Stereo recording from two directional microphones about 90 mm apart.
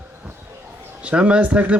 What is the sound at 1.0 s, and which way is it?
Speech, 15° right (ahead or behind).